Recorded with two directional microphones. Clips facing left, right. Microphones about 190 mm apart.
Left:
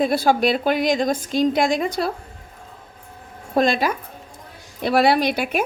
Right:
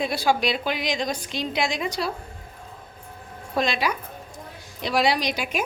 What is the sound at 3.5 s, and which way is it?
A woman's voice, 50° left (ahead or behind).